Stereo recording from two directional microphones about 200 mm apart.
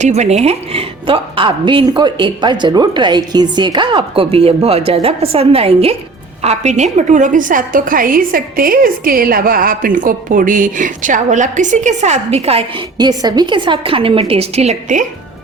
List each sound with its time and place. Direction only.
0.0 s a woman's voice: 35° right (ahead or behind)